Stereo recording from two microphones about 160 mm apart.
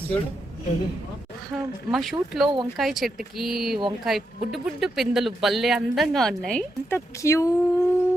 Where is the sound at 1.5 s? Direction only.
Centre (ahead or behind).